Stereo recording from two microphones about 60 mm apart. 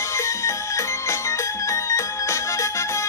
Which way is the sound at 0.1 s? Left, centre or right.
Left.